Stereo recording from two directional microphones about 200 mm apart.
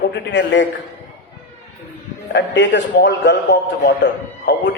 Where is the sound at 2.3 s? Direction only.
60° left (ahead or behind).